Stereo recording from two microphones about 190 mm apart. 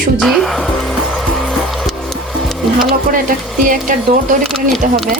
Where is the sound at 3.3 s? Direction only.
45° right (ahead or behind).